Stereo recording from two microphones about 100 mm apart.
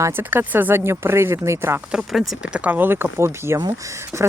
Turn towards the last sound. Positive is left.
turn(degrees=-30)  # may be behind; listen again after turning